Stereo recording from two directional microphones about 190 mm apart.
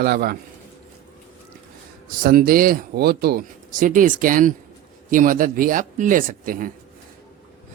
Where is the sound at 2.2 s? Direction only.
50° right (ahead or behind).